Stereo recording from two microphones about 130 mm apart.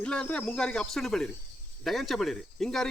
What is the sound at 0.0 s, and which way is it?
Speech, 10° left (ahead or behind).